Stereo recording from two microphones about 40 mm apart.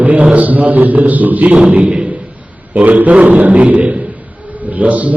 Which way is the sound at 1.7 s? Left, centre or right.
Right.